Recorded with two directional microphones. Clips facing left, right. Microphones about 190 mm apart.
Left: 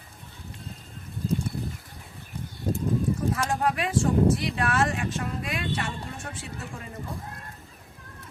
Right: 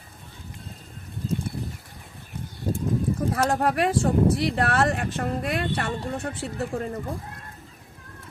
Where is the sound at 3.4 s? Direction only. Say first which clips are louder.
Right 4 dB; 60° right (ahead or behind).